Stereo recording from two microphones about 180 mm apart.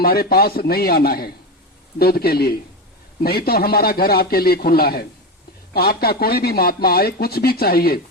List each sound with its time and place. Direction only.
0.0 s speech: 55° left (ahead or behind)